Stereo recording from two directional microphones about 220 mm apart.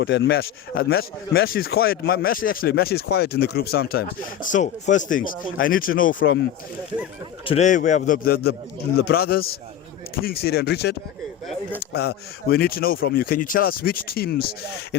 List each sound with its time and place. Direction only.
0.0 s a man's voice: 55° left (ahead or behind); by 6.2 s 40° left (ahead or behind)
7.4 s a man's voice: 30° left (ahead or behind); by 10.9 s 45° left (ahead or behind)
11.9 s speech: 45° left (ahead or behind)